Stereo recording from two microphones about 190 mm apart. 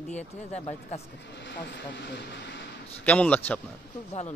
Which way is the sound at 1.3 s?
65° left (ahead or behind).